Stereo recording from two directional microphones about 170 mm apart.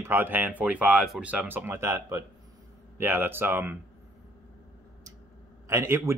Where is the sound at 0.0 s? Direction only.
15° right (ahead or behind).